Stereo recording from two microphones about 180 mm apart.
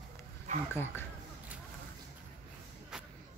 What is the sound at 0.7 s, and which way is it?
Speech, 10° left (ahead or behind).